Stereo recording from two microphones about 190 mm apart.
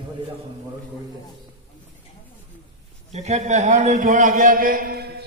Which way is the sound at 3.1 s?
35° right (ahead or behind).